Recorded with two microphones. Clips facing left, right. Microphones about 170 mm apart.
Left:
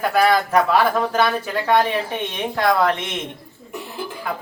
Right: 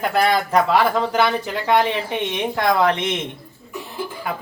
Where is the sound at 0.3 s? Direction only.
15° right (ahead or behind).